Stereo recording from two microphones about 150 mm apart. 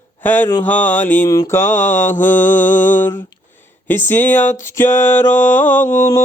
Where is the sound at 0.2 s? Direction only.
15° left (ahead or behind).